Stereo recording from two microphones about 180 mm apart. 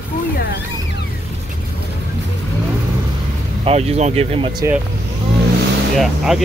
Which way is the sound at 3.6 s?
35° right (ahead or behind).